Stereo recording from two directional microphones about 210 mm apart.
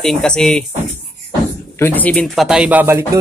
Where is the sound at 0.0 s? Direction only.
5° left (ahead or behind).